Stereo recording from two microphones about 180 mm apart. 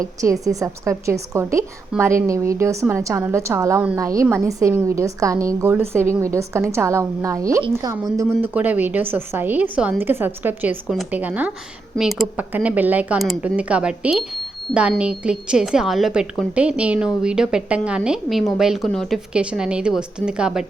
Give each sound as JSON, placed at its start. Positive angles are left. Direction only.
{"t": 0.0, "sound": "a woman's voice", "side_deg": -20}